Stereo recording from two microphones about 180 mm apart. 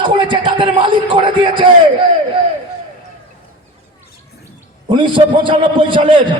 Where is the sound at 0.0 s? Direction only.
25° right (ahead or behind).